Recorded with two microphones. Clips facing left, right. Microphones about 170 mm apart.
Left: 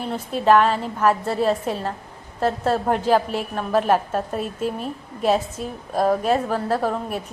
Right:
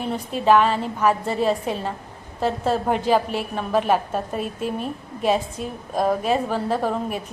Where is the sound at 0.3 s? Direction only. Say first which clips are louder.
Left 1 dB; 5° right (ahead or behind).